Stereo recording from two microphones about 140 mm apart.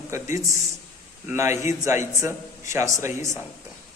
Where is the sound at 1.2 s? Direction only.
20° right (ahead or behind).